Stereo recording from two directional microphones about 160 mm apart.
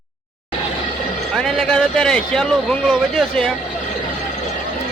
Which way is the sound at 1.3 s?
Centre (ahead or behind).